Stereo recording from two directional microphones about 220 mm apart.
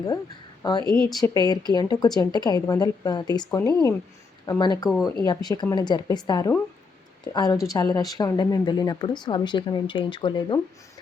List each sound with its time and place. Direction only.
0.6 s a woman's voice: 20° left (ahead or behind)